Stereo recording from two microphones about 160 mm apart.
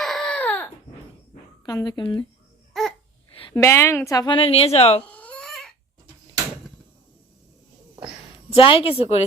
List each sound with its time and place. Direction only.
0.0 s baby cry: 5° left (ahead or behind)
1.6 s a woman's voice: 25° left (ahead or behind)
2.8 s babbling: centre (ahead or behind)
3.5 s a woman's voice: 15° left (ahead or behind)
4.4 s a woman's voice: 35° left (ahead or behind)
5.0 s baby cry: 10° left (ahead or behind)
8.5 s a woman's voice: 35° left (ahead or behind)